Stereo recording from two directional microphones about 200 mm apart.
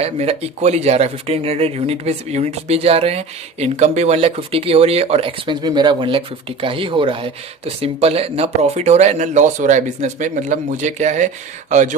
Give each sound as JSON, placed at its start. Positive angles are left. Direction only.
{"t": 0.0, "sound": "speech", "side_deg": -30}